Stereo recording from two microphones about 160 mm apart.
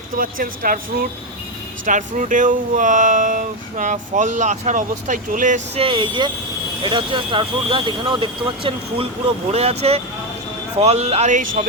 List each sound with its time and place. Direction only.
0.2 s speech: 60° right (ahead or behind)
5.8 s speech: 30° right (ahead or behind)